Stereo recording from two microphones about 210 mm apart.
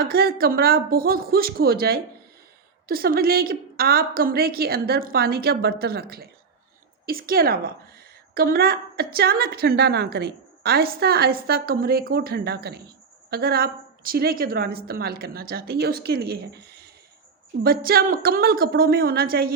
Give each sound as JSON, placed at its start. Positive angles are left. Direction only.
{"t": 0.0, "sound": "a woman's voice", "side_deg": -45}